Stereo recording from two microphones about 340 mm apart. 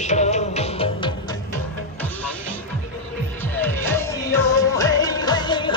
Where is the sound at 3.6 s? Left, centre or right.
Centre.